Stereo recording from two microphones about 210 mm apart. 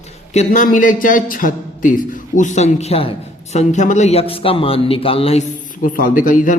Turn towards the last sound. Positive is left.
turn(degrees=40)  # may be behind; listen again after turning